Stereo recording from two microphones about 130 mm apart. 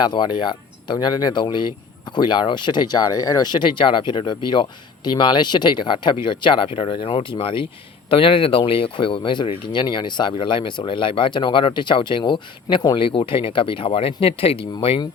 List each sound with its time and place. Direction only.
0.0 s speech: 35° left (ahead or behind)